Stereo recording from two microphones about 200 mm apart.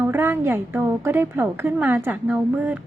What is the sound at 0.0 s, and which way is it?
A woman's voice, 10° right (ahead or behind).